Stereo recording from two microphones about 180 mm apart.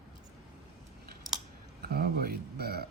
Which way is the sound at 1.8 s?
60° right (ahead or behind).